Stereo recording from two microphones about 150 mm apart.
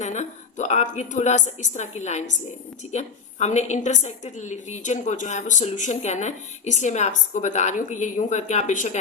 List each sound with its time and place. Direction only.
0.0 s a woman's voice: 50° left (ahead or behind)